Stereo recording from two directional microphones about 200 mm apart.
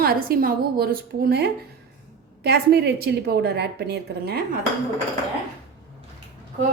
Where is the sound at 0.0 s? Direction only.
50° right (ahead or behind).